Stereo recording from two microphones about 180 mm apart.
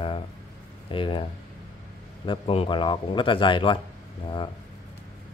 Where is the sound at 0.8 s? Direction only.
30° left (ahead or behind).